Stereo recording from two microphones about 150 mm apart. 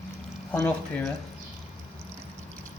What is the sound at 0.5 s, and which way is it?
Speech, 10° left (ahead or behind).